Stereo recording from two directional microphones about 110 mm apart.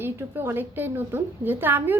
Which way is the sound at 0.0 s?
20° right (ahead or behind).